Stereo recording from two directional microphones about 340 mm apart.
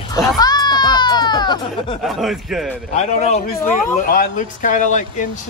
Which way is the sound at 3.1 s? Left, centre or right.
Left.